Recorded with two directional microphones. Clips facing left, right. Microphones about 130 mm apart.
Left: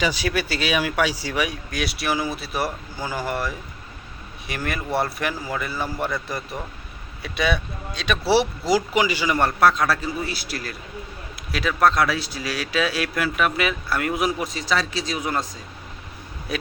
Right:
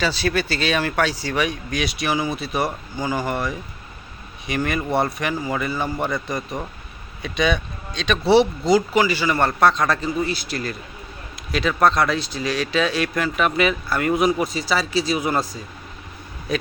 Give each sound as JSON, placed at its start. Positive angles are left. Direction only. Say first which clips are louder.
{"t": 0.0, "sound": "speech", "louder": "right 2 dB", "side_deg": 15}
{"t": 5.7, "sound": "a man's voice", "louder": "right 2 dB", "side_deg": -20}
{"t": 6.1, "sound": "speech", "louder": "right 3 dB", "side_deg": 5}
{"t": 16.5, "sound": "speech", "louder": "right 4 dB", "side_deg": 5}